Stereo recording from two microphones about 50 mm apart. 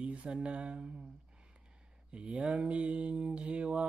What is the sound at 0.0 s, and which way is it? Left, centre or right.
Mantra, right.